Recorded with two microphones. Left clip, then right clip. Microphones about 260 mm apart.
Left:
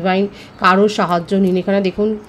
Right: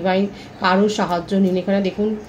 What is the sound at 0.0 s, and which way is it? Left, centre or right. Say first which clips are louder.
Speech: left 2 dB; left.